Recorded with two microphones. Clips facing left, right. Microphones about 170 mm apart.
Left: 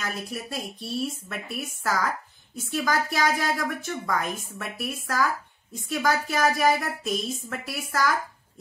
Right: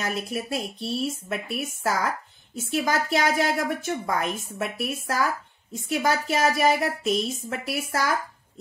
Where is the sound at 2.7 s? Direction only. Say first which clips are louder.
Right 2 dB; 25° right (ahead or behind).